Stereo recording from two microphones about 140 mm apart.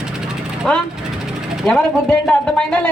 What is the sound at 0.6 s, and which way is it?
A man's voice, 5° left (ahead or behind).